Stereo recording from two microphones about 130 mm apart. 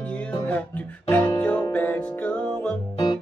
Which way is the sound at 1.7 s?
15° left (ahead or behind).